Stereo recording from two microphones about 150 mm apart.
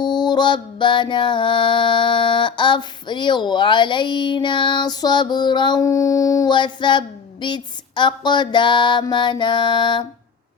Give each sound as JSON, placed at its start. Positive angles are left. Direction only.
{"t": 0.0, "sound": "mantra", "side_deg": 30}